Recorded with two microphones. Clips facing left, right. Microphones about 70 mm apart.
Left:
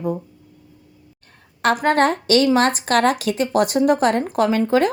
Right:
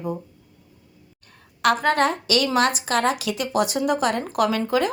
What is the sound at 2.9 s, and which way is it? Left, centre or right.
A woman's voice, left.